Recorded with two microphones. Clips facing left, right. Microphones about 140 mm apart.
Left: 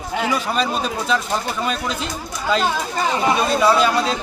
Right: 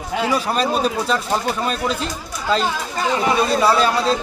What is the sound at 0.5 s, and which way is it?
Speech, 40° right (ahead or behind).